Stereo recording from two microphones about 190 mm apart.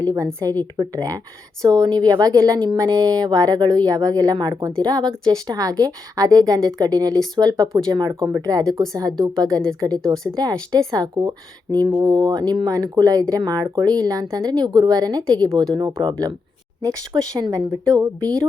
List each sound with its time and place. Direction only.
0.0 s speech: 20° right (ahead or behind)